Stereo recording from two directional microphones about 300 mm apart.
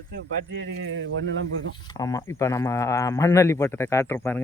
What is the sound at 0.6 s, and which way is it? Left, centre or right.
Speech, right.